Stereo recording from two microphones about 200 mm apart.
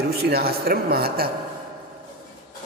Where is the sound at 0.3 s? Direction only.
50° right (ahead or behind).